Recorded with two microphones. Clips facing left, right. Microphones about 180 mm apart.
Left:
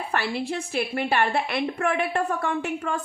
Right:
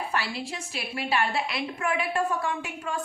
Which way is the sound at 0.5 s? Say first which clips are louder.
Left 8 dB; 55° left (ahead or behind).